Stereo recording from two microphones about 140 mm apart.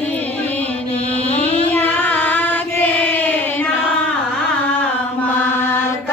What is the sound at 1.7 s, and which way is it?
Child singing, 10° left (ahead or behind).